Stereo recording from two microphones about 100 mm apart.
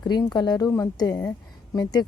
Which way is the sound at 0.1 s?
45° left (ahead or behind).